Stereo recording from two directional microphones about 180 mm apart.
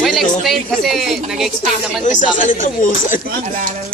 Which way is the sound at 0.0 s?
Centre (ahead or behind).